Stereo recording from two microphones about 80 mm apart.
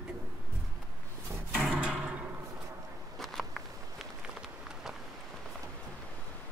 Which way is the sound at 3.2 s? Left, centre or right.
Centre.